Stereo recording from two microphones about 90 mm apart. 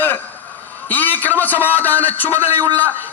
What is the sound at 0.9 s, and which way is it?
A man's voice, 20° left (ahead or behind).